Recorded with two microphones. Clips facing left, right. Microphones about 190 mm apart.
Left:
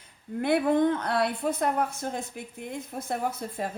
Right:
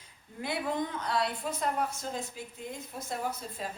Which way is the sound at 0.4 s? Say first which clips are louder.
Left 10 dB; 60° left (ahead or behind).